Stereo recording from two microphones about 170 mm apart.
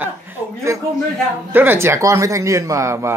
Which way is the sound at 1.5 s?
10° right (ahead or behind).